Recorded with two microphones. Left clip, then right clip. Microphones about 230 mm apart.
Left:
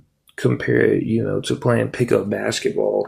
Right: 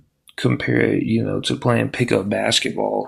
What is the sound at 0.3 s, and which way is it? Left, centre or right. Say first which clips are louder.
Speech: left 1 dB; centre.